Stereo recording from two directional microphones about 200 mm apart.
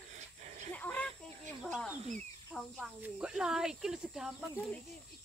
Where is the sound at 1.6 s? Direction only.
Centre (ahead or behind).